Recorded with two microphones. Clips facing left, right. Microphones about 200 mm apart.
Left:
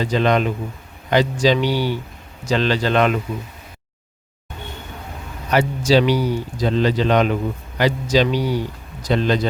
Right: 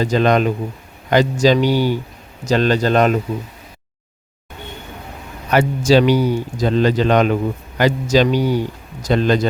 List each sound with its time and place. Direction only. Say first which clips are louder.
0.0 s speech: right 3 dB; 45° right (ahead or behind)
5.5 s speech: right 3 dB; 50° right (ahead or behind)